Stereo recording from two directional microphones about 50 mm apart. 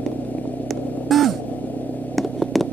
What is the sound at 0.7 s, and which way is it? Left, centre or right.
Vehicle, centre.